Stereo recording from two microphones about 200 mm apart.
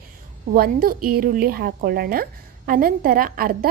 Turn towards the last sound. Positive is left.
turn(degrees=-45)  # may be behind; listen again after turning